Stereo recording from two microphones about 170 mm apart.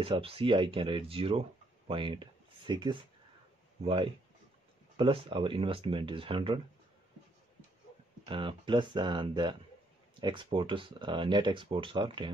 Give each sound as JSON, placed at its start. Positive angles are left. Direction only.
{"t": 0.0, "sound": "speech", "side_deg": -35}
{"t": 8.3, "sound": "speech", "side_deg": -30}